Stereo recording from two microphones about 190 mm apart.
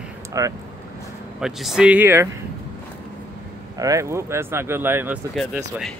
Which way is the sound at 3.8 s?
15° right (ahead or behind).